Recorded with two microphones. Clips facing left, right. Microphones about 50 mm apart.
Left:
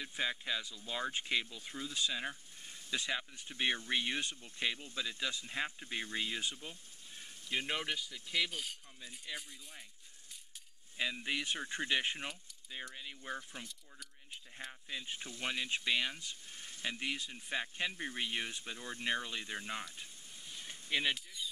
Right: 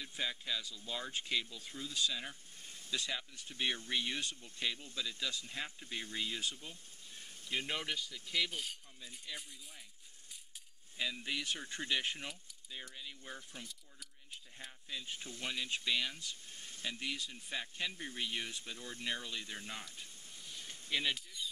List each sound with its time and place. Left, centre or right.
0.0 s speech: left; by 8.7 s centre
9.0 s speech: centre
11.0 s speech: left
14.7 s speech: left
20.6 s a sound: centre
21.1 s speech: centre